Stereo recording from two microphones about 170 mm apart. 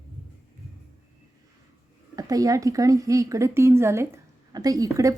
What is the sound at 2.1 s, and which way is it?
A woman's voice, 20° right (ahead or behind).